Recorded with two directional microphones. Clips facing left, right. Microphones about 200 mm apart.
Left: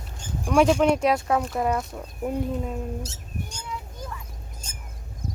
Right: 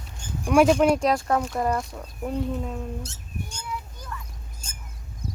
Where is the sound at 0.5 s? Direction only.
5° right (ahead or behind).